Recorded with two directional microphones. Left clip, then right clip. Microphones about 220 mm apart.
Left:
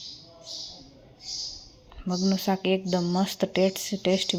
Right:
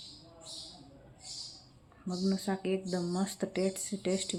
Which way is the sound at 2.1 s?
25° left (ahead or behind).